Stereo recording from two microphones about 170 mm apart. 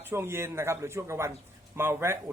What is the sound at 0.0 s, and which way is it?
Speech, 15° right (ahead or behind).